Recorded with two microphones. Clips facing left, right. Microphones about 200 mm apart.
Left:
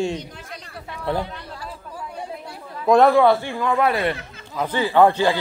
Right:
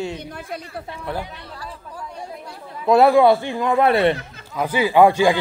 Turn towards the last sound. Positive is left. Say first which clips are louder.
# right 2 dB
turn(degrees=-15)  # may be behind; listen again after turning